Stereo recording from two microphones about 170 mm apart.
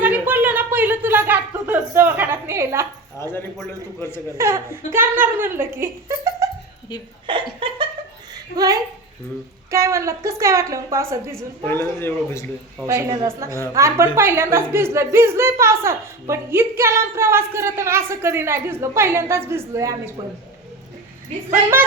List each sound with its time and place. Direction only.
0.0 s a sound: 10° right (ahead or behind)
4.4 s speech: 15° right (ahead or behind)
7.3 s laughter: 30° right (ahead or behind)
8.5 s speech: 20° right (ahead or behind)
11.3 s a man's voice: 10° left (ahead or behind)
12.9 s speech: 15° right (ahead or behind)
21.5 s speech: 10° right (ahead or behind)